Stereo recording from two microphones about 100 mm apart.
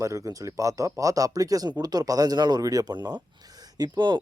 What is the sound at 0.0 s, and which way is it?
Speech, 35° right (ahead or behind).